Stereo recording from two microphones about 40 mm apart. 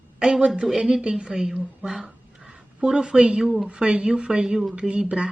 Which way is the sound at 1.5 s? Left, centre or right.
Centre.